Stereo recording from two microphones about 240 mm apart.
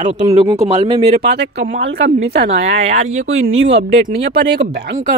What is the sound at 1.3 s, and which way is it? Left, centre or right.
Speech, right.